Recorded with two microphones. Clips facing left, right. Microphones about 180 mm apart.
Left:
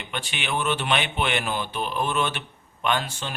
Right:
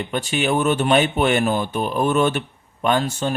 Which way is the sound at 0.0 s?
40° right (ahead or behind).